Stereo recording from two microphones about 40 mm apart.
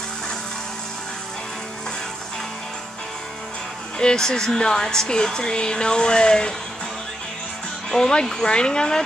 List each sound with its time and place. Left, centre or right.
4.0 s speech: centre
7.9 s speech: centre